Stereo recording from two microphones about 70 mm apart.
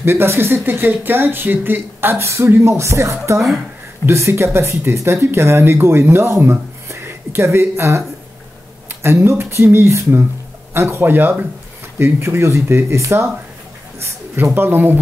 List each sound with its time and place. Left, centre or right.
0.0 s speech: right
9.0 s speech: right